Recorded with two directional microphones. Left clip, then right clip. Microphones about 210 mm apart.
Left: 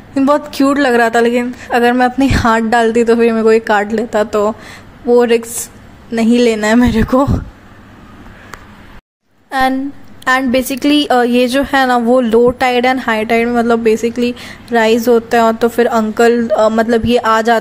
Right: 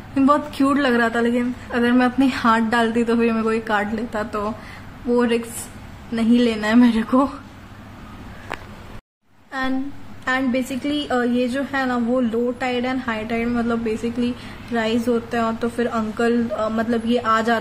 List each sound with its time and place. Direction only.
0.1 s a woman's voice: 30° left (ahead or behind)
9.5 s a woman's voice: 40° left (ahead or behind)